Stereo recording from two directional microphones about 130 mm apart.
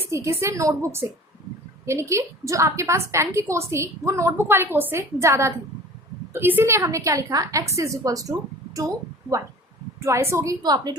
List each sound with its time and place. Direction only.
0.1 s a woman's voice: 20° right (ahead or behind)
10.0 s a woman's voice: 20° right (ahead or behind)